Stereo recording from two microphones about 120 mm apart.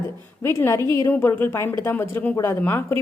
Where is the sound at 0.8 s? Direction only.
40° right (ahead or behind).